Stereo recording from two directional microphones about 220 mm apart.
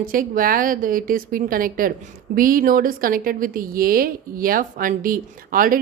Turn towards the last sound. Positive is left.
turn(degrees=-40)  # may be behind; listen again after turning